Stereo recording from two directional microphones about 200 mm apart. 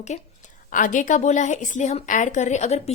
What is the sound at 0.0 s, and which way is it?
A woman's voice, 35° left (ahead or behind).